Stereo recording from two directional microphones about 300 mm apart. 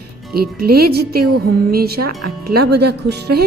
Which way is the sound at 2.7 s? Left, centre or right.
Right.